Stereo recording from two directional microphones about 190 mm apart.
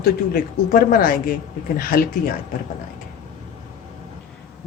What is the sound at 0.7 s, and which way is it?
A woman's voice, 50° left (ahead or behind).